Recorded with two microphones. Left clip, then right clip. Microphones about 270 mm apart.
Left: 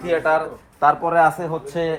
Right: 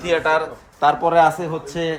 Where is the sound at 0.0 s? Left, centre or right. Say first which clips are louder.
Right 1 dB; centre.